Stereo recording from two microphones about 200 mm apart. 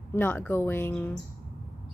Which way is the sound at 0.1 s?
10° left (ahead or behind).